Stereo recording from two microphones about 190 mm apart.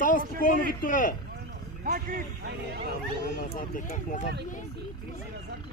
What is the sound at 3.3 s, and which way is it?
Speech, 45° left (ahead or behind).